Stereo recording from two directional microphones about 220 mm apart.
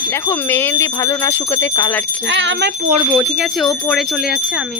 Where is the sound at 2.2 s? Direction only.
55° right (ahead or behind).